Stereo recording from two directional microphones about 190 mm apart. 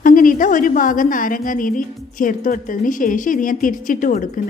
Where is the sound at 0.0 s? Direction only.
45° left (ahead or behind).